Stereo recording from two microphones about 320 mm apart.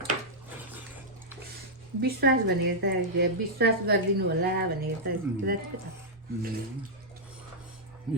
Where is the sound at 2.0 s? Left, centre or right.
Right.